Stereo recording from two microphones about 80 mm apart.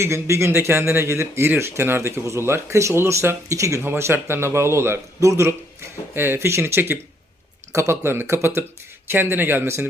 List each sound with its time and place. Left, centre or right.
0.0 s speech: right